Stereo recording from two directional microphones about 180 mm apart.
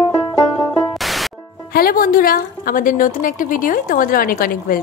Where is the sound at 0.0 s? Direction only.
20° left (ahead or behind).